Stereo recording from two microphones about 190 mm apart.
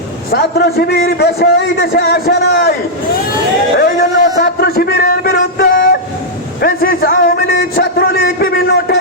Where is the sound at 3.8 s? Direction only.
60° left (ahead or behind).